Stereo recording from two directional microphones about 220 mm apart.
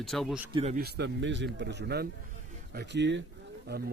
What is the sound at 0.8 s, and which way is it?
Speech, 50° right (ahead or behind).